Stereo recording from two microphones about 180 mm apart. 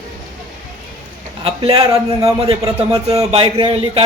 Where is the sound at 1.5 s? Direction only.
30° right (ahead or behind).